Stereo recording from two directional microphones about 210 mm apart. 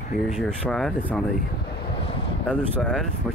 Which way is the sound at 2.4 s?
5° left (ahead or behind).